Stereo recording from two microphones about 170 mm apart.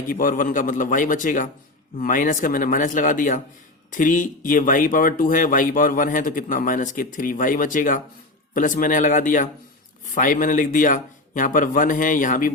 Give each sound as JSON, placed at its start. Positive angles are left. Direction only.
{"t": 0.1, "sound": "speech", "side_deg": 55}